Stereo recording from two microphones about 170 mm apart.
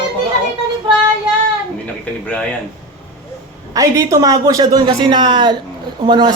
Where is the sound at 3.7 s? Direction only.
20° right (ahead or behind).